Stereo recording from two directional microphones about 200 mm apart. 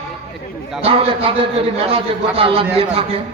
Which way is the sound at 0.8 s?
30° right (ahead or behind).